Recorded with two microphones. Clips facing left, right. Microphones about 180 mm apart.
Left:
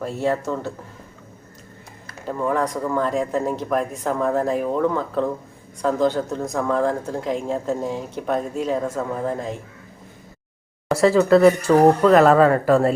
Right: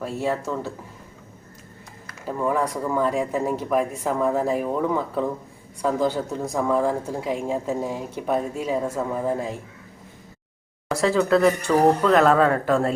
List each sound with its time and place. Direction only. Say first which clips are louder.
0.0 s speech: left 3 dB; 5° right (ahead or behind)
2.2 s speech: left 1 dB; 5° right (ahead or behind)
10.8 s speech: left 5 dB; 5° left (ahead or behind)